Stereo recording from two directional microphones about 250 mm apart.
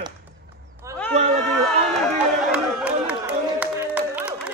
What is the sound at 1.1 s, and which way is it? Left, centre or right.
Speech, right.